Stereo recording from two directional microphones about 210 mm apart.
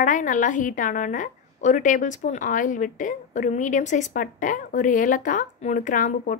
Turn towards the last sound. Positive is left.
turn(degrees=40)  # may be behind; listen again after turning